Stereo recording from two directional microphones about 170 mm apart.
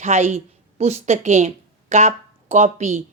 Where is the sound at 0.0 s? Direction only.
45° right (ahead or behind).